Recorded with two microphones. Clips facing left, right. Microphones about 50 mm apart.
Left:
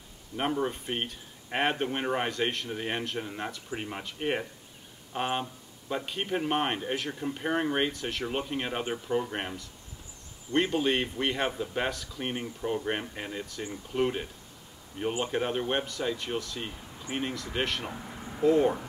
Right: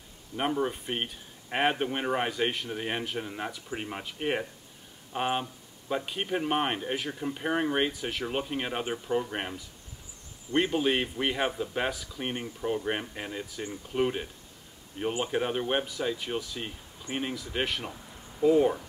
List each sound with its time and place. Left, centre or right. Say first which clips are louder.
0.4 s speech: right 1 dB; centre
17.9 s a sound: left 7 dB; left
18.4 s speech: right 1 dB; centre